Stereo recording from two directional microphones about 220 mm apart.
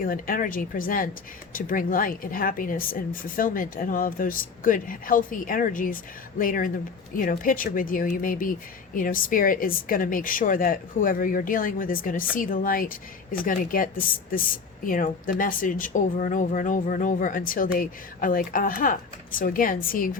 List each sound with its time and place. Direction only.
0.0 s speech: 40° left (ahead or behind)